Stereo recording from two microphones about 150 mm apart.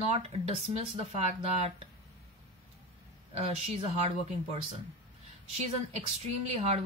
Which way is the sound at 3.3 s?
45° right (ahead or behind).